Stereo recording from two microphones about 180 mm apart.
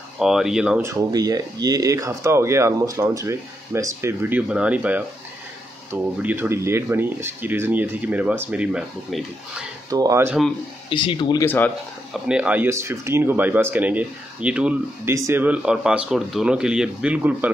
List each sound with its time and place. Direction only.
0.2 s speech: centre (ahead or behind)
0.8 s speech: 20° right (ahead or behind)
6.1 s speech: 10° right (ahead or behind)
9.8 s speech: 20° right (ahead or behind)
10.9 s speech: 25° left (ahead or behind)
11.4 s speech: 10° left (ahead or behind)
12.1 s speech: 5° right (ahead or behind)